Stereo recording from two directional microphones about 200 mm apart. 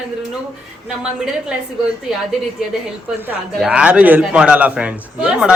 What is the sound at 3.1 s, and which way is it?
A man's voice, 10° right (ahead or behind).